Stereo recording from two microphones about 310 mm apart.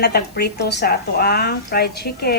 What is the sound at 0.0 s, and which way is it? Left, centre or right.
Speech, left.